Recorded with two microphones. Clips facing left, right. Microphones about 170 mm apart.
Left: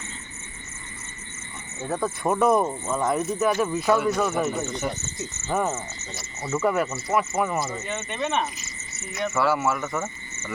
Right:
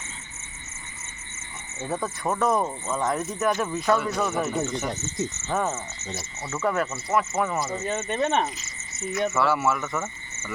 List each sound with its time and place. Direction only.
1.8 s speech: centre (ahead or behind)
2.0 s speech: 10° left (ahead or behind)
5.5 s speech: 15° left (ahead or behind)
7.9 s speech: 40° right (ahead or behind)
9.3 s speech: centre (ahead or behind)